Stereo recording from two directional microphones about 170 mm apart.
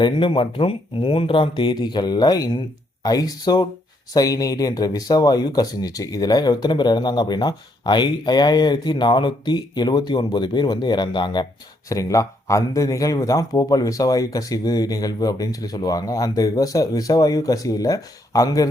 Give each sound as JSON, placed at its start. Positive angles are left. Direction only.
{"t": 0.0, "sound": "speech", "side_deg": 30}